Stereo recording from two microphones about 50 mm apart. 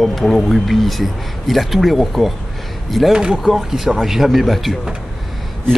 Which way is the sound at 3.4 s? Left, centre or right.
Centre.